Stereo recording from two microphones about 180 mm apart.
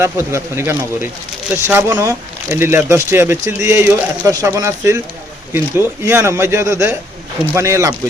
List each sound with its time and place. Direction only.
0.0 s speech: 15° right (ahead or behind)